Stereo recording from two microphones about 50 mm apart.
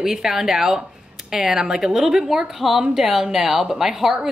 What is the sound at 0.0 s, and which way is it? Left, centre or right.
A woman's voice, centre.